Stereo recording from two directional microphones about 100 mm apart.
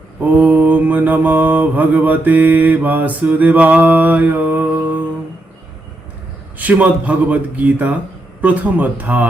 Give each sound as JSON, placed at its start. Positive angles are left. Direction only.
{"t": 0.2, "sound": "mantra", "side_deg": -15}
{"t": 6.6, "sound": "speech", "side_deg": -15}